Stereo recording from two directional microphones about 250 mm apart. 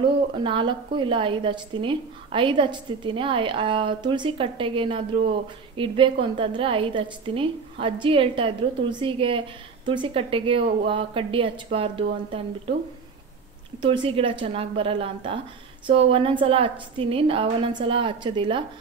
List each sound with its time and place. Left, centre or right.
0.0 s a woman's voice: centre
13.7 s a woman's voice: right